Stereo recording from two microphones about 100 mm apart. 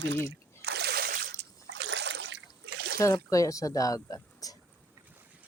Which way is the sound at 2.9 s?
35° left (ahead or behind).